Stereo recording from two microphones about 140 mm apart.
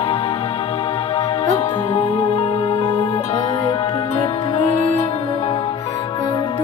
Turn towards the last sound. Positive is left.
turn(degrees=30)  # may be behind; listen again after turning